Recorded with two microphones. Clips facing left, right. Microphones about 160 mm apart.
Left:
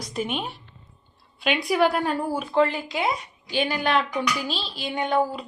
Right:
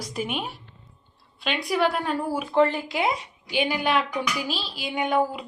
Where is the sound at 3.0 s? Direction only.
15° right (ahead or behind).